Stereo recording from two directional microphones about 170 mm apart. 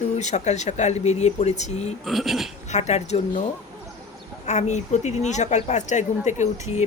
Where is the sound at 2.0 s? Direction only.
Centre (ahead or behind).